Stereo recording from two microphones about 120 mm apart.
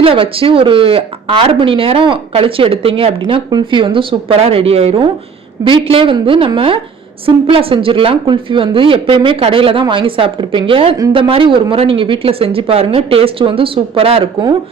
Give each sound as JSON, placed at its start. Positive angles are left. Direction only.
{"t": 0.0, "sound": "speech", "side_deg": -50}